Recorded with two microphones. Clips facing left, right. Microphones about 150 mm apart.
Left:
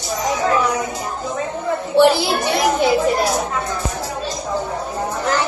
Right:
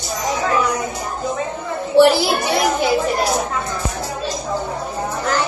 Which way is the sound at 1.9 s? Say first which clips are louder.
Right 1 dB; 20° left (ahead or behind).